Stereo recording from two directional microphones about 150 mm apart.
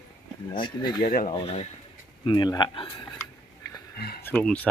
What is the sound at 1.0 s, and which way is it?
Speech, 70° left (ahead or behind).